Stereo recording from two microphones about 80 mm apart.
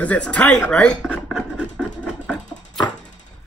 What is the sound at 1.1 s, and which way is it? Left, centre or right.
Scratch, centre.